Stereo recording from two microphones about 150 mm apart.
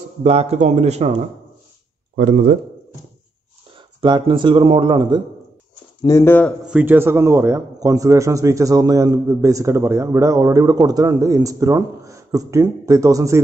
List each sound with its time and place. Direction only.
0.2 s speech: 45° right (ahead or behind)
2.1 s speech: 70° right (ahead or behind)
3.7 s speech: 30° right (ahead or behind)
6.0 s speech: 15° left (ahead or behind)
6.6 s a man's voice: 10° right (ahead or behind)